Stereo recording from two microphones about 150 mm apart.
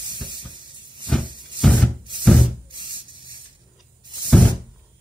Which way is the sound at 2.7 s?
30° right (ahead or behind).